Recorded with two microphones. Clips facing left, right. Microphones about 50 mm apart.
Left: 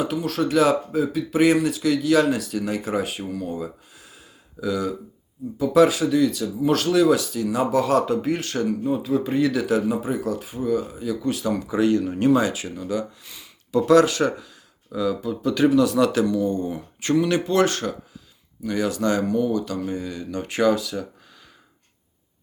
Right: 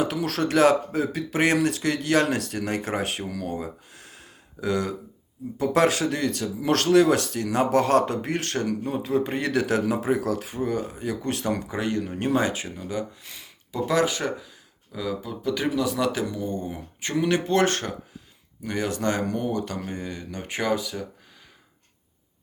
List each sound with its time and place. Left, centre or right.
0.0 s speech: right
3.6 s a sound: right
5.5 s speech: right
11.7 s speech: right
13.7 s speech: centre
16.7 s a sound: centre
17.3 s speech: right